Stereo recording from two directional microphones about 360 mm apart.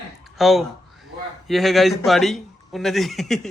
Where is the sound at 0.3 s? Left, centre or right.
Centre.